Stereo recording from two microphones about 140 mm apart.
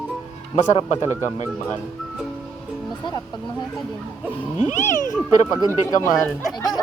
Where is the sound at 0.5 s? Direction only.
50° left (ahead or behind).